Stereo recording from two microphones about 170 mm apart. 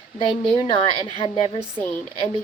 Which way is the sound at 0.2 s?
30° left (ahead or behind).